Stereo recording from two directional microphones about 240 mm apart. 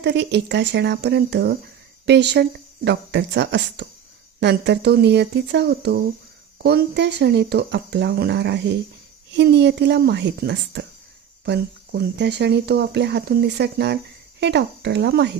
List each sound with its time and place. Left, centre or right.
0.0 s speech: right